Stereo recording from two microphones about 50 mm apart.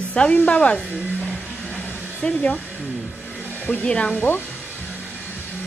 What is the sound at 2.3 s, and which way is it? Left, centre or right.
Speech, left.